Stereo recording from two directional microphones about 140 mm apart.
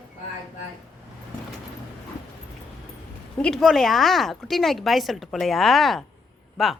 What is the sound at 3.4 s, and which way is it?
A woman's voice, 5° left (ahead or behind).